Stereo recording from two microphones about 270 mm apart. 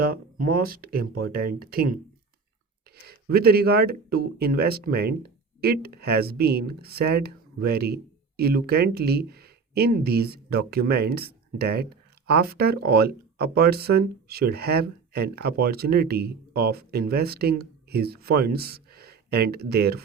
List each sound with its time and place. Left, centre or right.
0.0 s speech: right
2.9 s speech: right